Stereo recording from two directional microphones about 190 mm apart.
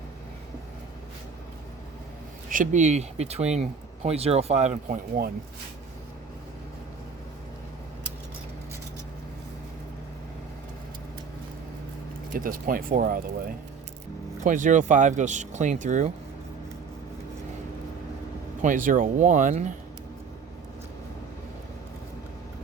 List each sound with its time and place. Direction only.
2.5 s speech: 40° right (ahead or behind)
12.3 s speech: 45° right (ahead or behind)
14.4 s speech: 40° right (ahead or behind)
18.6 s speech: 40° right (ahead or behind)